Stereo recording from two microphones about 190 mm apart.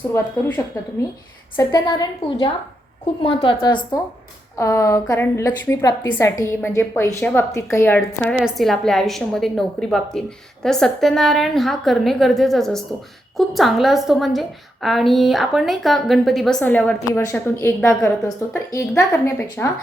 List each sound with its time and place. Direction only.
0.1 s a woman's voice: 10° left (ahead or behind)
1.5 s a woman's voice: 20° left (ahead or behind)